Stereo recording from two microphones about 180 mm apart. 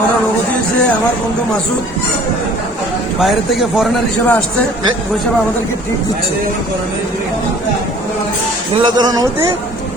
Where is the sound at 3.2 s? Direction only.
Centre (ahead or behind).